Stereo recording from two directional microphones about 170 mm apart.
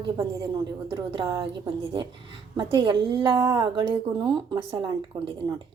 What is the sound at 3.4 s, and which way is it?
Speech, 15° right (ahead or behind).